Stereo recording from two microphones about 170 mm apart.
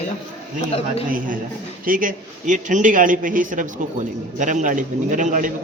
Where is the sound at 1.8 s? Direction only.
55° right (ahead or behind).